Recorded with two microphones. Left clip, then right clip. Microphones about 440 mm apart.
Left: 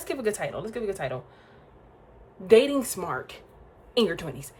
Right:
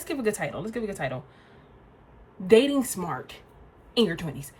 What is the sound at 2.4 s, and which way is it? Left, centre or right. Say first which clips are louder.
Speech: left 1 dB; centre.